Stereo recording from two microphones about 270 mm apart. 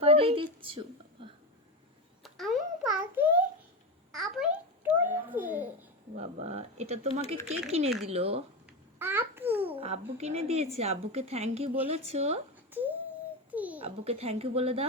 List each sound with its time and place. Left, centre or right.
0.0 s a sound: right
2.2 s babbling: centre
6.1 s a woman's voice: right
9.0 s babbling: centre
9.6 s a woman's voice: right
12.7 s a sound: centre
13.5 s babbling: centre
13.7 s a woman's voice: right